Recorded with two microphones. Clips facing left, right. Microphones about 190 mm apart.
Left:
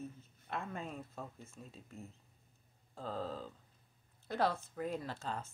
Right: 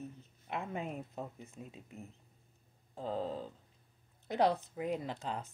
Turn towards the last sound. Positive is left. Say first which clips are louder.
# right 2 dB
turn(degrees=-15)  # may be behind; listen again after turning